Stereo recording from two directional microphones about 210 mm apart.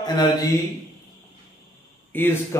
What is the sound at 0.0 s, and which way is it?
Speech, 20° left (ahead or behind).